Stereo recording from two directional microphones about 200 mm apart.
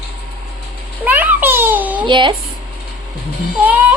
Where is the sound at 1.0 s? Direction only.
10° right (ahead or behind).